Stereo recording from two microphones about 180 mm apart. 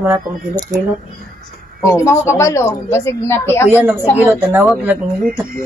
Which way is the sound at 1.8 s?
15° left (ahead or behind).